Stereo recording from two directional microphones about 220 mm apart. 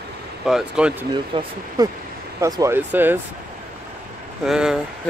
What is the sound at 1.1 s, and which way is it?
Speech, 20° right (ahead or behind).